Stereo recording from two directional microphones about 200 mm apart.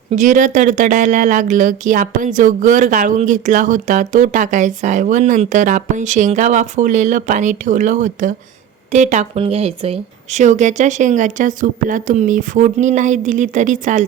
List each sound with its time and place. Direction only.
0.1 s speech: 40° right (ahead or behind)